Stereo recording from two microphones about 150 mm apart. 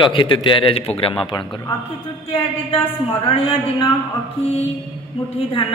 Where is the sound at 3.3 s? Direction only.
40° left (ahead or behind).